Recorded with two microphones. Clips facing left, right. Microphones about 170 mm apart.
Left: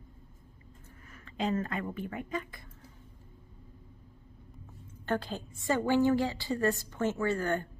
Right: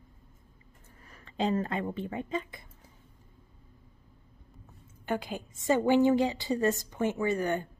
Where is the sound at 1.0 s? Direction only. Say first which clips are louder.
Right 3 dB; 35° right (ahead or behind).